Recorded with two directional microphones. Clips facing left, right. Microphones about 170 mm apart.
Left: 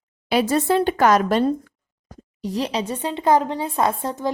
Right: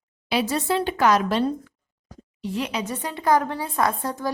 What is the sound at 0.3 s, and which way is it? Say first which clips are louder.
A woman's voice: left 5 dB; 50° left (ahead or behind).